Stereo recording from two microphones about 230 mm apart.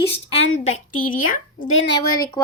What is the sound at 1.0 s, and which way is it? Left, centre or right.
Speech, left.